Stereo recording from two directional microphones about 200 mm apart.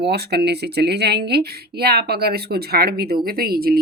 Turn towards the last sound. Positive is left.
turn(degrees=-50)  # may be behind; listen again after turning